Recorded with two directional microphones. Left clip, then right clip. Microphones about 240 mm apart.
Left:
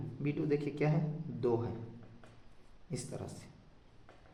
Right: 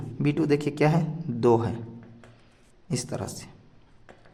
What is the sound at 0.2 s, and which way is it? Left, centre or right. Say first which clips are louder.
A man's voice: right 10 dB; right.